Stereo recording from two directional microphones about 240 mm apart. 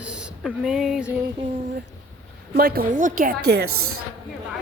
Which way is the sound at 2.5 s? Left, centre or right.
Right.